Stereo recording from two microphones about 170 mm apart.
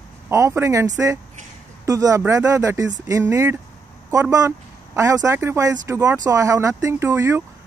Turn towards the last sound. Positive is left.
turn(degrees=-15)  # may be behind; listen again after turning